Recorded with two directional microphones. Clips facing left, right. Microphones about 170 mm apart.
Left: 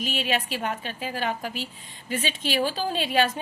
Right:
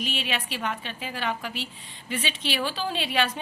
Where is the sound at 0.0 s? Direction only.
45° left (ahead or behind).